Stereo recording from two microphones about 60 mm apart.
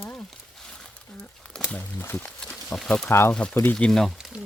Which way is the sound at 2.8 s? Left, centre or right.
Centre.